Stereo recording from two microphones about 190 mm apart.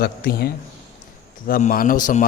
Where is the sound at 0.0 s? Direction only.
55° left (ahead or behind).